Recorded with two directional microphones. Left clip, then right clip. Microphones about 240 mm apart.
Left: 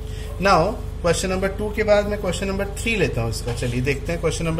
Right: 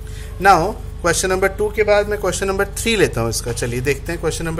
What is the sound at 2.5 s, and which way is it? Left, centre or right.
Speech, right.